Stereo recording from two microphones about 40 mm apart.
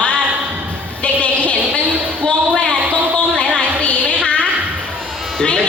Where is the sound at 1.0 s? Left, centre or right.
Left.